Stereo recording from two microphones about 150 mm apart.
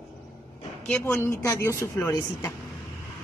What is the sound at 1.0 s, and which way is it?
A woman's voice, 20° left (ahead or behind).